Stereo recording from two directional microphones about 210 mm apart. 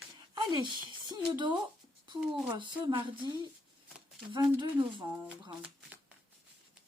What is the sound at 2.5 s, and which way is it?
Speech, 25° right (ahead or behind).